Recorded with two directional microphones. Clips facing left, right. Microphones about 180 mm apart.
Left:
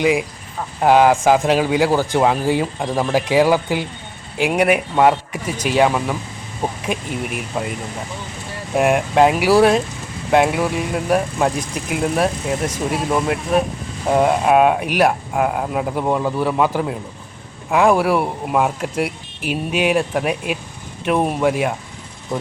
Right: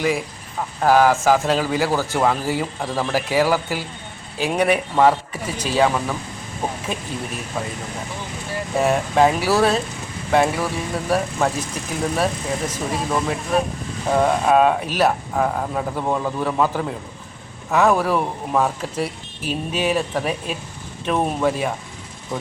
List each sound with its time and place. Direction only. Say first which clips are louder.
0.0 s speech: left 4 dB; 15° left (ahead or behind)
8.7 s speech: left 3 dB; 10° left (ahead or behind)